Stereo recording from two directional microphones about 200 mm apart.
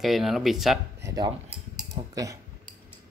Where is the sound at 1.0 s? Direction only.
20° right (ahead or behind).